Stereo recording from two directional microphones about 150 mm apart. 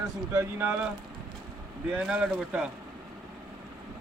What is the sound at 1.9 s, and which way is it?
Speech, 5° right (ahead or behind).